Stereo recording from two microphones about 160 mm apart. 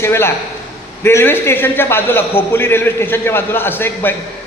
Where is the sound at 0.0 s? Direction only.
15° left (ahead or behind).